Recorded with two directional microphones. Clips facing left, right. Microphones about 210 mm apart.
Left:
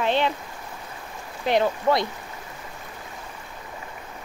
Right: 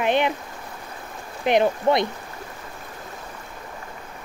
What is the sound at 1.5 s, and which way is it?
Speech, 20° right (ahead or behind).